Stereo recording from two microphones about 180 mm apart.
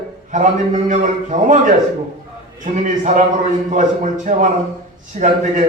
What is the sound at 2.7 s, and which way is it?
A man's voice, 45° right (ahead or behind).